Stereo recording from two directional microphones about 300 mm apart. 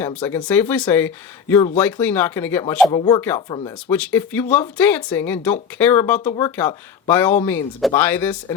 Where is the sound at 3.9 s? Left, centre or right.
Centre.